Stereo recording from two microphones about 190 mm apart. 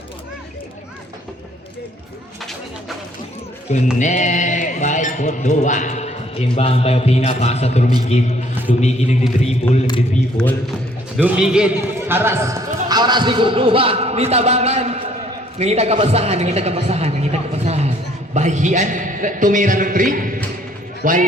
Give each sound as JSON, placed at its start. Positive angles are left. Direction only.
{"t": 3.9, "sound": "speech", "side_deg": 40}
{"t": 10.4, "sound": "a man's voice", "side_deg": 5}